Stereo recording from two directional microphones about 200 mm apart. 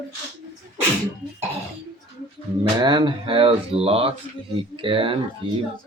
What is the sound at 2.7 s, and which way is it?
Speech, 25° right (ahead or behind).